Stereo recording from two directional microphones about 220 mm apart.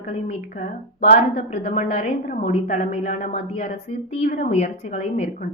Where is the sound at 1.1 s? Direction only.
30° left (ahead or behind).